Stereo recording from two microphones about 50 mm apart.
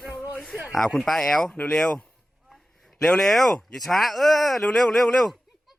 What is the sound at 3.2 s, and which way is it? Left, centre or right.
Speech, centre.